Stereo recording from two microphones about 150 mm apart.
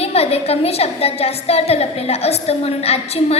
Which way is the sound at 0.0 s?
40° left (ahead or behind).